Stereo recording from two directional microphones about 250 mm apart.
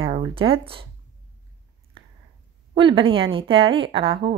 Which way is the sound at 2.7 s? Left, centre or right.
Centre.